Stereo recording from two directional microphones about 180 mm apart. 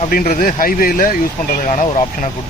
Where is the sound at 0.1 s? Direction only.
50° left (ahead or behind).